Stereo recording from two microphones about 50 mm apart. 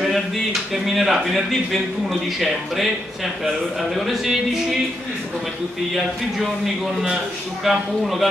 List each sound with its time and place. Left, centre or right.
0.0 s a man's voice: centre
3.9 s a man's voice: centre
5.9 s a man's voice: centre